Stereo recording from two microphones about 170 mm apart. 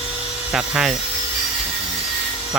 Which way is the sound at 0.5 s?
5° right (ahead or behind).